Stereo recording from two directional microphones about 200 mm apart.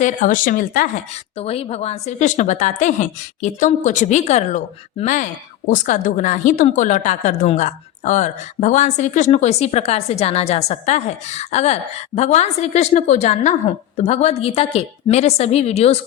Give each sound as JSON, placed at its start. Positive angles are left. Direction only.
{"t": 0.0, "sound": "speech", "side_deg": 40}